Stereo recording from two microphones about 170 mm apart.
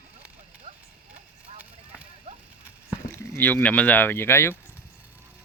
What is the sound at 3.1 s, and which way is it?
Speech, 15° left (ahead or behind).